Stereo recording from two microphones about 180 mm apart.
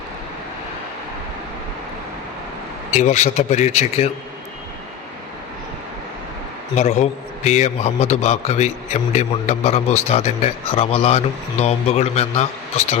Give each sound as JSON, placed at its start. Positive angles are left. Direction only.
{"t": 2.9, "sound": "a man's voice", "side_deg": 40}
{"t": 6.7, "sound": "a man's voice", "side_deg": 40}